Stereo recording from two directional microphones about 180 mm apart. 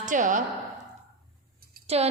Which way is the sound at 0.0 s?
45° right (ahead or behind).